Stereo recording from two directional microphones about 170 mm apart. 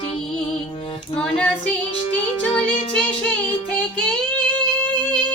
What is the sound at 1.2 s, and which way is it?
Female singing, 5° left (ahead or behind).